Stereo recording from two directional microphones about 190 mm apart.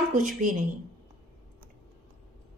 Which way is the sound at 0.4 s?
45° right (ahead or behind).